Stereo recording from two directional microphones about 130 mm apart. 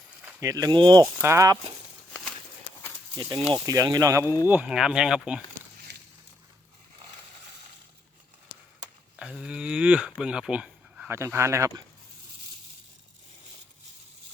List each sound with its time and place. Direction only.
0.3 s speech: 25° right (ahead or behind)
1.0 s speech: 20° right (ahead or behind)
3.2 s speech: 35° right (ahead or behind)
4.4 s speech: 10° right (ahead or behind)
9.1 s a sound: 5° right (ahead or behind)
11.1 s speech: 20° right (ahead or behind)